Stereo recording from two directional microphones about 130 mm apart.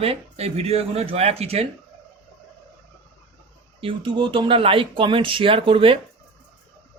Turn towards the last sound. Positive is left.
turn(degrees=-45)  # may be behind; listen again after turning